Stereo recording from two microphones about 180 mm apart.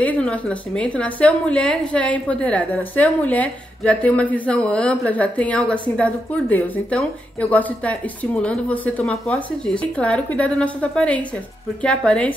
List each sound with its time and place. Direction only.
0.0 s a woman's voice: 5° left (ahead or behind)